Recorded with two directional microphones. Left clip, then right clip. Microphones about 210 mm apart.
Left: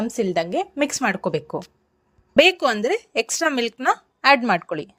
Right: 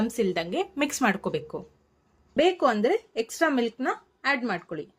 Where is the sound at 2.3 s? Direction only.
45° left (ahead or behind).